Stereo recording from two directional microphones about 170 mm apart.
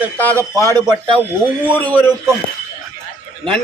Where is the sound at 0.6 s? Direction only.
25° right (ahead or behind).